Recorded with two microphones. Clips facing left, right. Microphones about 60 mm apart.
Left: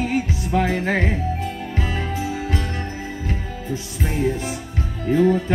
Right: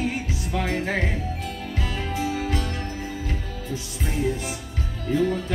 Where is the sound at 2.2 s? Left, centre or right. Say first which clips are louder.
Right 3 dB; left.